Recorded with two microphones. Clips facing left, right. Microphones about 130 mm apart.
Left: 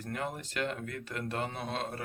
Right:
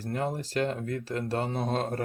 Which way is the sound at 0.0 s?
35° right (ahead or behind).